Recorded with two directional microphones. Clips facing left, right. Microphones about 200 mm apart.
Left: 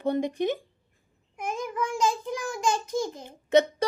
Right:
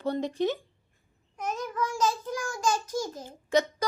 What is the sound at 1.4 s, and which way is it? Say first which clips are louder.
Babbling: left 1 dB; 10° left (ahead or behind).